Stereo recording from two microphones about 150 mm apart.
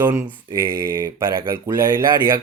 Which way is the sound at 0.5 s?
20° right (ahead or behind).